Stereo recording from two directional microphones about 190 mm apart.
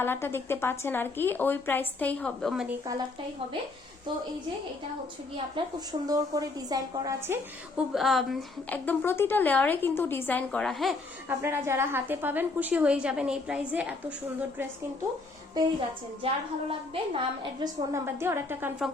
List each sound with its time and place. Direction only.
0.0 s a woman's voice: 10° left (ahead or behind)
5.6 s a woman's voice: 25° right (ahead or behind)
7.8 s a woman's voice: centre (ahead or behind)
11.3 s a woman's voice: 10° right (ahead or behind)
15.6 s a woman's voice: 20° right (ahead or behind)
17.9 s a woman's voice: 15° right (ahead or behind)